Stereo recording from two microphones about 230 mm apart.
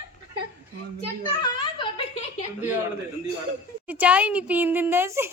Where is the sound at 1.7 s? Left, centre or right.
Left.